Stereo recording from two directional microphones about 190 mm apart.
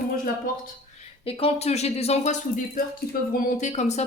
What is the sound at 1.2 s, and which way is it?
Speech, 30° left (ahead or behind).